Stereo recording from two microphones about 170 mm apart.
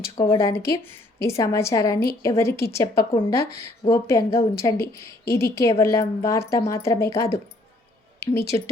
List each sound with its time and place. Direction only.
0.0 s a woman's voice: 20° left (ahead or behind)
3.1 s speech: 30° left (ahead or behind)
3.3 s a woman's voice: 15° left (ahead or behind)